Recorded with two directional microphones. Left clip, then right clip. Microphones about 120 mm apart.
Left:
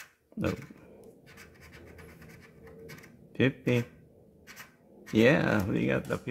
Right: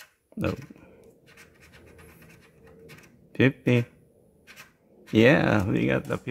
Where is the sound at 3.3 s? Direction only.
40° right (ahead or behind).